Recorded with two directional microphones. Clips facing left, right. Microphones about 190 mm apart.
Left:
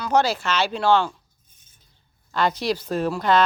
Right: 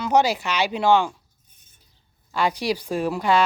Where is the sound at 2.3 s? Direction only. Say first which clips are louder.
Even; 10° right (ahead or behind).